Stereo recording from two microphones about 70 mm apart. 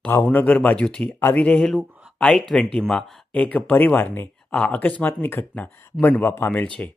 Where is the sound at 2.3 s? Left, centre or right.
Centre; by 4.3 s left.